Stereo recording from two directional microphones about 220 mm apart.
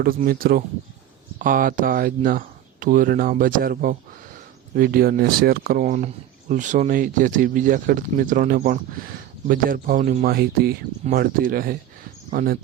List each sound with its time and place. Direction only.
0.0 s speech: 40° right (ahead or behind)